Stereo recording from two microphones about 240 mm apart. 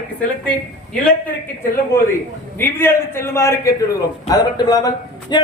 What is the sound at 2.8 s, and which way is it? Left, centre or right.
A man's voice, centre.